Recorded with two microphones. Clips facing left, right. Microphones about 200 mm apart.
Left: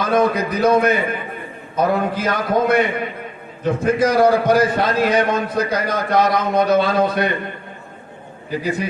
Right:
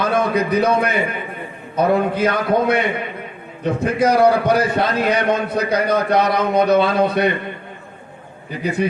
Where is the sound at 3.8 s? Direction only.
65° right (ahead or behind).